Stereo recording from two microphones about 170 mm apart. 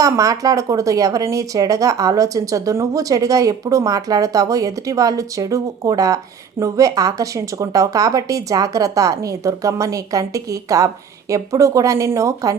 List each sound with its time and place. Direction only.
0.0 s a woman's voice: 20° right (ahead or behind)